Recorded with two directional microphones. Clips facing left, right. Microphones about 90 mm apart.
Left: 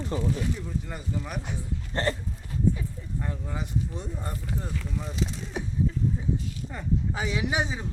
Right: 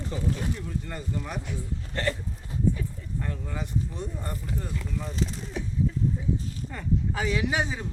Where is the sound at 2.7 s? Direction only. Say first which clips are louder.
Even; 15° left (ahead or behind).